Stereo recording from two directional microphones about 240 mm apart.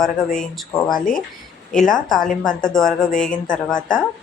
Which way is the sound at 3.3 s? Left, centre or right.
Left.